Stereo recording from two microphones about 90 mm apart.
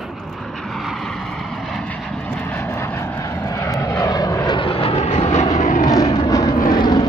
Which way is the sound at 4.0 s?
45° left (ahead or behind).